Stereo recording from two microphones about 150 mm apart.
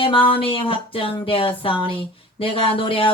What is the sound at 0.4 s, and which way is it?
Speech, 35° left (ahead or behind).